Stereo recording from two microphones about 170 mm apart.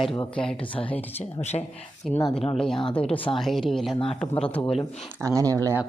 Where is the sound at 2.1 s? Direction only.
Centre (ahead or behind).